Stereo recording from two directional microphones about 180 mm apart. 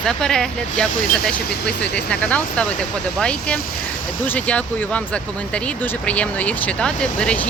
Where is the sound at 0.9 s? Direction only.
50° left (ahead or behind).